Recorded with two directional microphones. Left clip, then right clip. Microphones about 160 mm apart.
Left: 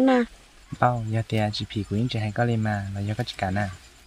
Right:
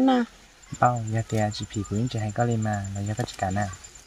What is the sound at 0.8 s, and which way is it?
Speech, 15° left (ahead or behind).